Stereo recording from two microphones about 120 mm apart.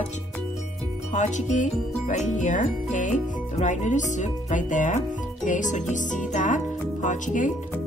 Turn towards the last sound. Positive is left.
turn(degrees=90)